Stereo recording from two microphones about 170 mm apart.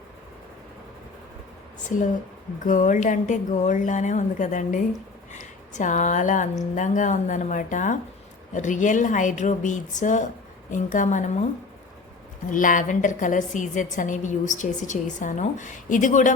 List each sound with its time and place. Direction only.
2.6 s a woman's voice: 50° left (ahead or behind)
12.5 s a woman's voice: 50° left (ahead or behind)